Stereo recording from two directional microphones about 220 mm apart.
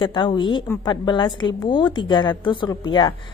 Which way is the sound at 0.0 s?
20° left (ahead or behind).